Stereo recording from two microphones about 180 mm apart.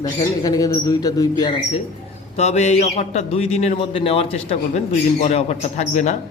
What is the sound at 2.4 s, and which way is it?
A man's voice, 40° left (ahead or behind).